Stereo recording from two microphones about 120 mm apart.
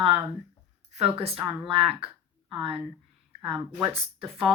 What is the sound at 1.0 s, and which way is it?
Speech, 55° right (ahead or behind).